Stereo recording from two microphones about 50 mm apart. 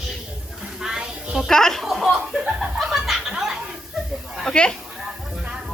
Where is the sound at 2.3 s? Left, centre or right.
Centre.